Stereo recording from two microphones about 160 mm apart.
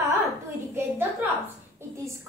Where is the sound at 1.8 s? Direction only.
15° right (ahead or behind).